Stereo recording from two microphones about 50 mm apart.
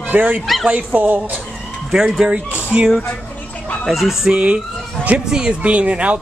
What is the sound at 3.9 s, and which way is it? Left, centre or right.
Speech, centre.